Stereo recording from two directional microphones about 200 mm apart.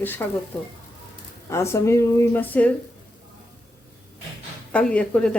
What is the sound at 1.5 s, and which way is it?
Speech, 15° left (ahead or behind).